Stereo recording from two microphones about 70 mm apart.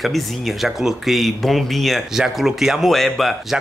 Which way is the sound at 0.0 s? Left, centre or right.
Centre.